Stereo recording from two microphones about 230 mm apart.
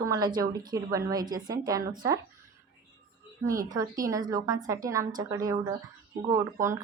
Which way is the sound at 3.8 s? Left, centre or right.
Centre.